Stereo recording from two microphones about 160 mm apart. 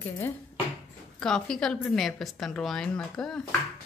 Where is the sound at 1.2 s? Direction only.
5° left (ahead or behind).